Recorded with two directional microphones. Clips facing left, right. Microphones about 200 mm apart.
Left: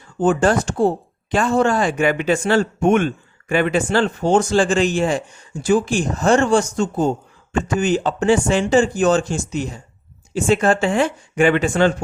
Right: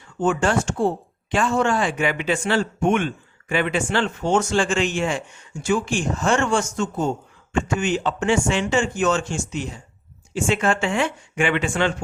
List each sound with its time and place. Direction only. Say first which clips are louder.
0.2 s speech: left 4 dB; 35° left (ahead or behind)